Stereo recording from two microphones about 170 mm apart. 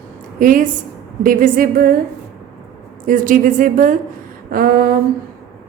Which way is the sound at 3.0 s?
50° right (ahead or behind).